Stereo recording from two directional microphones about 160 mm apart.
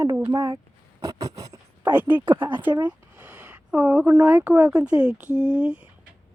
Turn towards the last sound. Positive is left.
turn(degrees=-5)  # may be behind; listen again after turning